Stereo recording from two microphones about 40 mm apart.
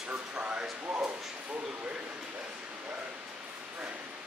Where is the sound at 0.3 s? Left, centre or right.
Right.